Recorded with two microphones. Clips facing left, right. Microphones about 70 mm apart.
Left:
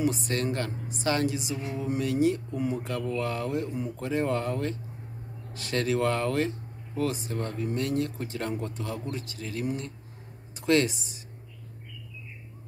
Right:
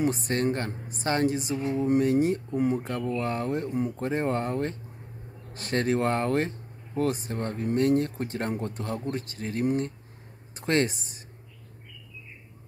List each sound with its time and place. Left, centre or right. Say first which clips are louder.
0.0 s speech: right 2 dB; right
2.9 s speech: right 1 dB; right